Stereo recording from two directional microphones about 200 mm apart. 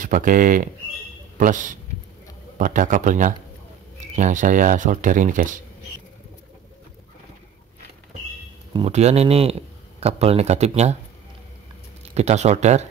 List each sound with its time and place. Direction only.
0.0 s a man's voice: 40° right (ahead or behind)
8.7 s a man's voice: 30° right (ahead or behind)
12.0 s speech: 35° right (ahead or behind)